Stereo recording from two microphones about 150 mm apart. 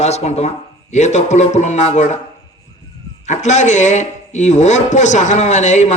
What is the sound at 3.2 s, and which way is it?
A man's voice, 50° left (ahead or behind).